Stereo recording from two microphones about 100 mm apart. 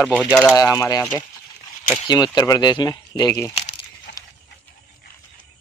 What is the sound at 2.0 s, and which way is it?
Speech, 45° left (ahead or behind).